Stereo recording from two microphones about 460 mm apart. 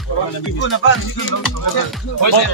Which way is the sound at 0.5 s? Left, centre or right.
Left.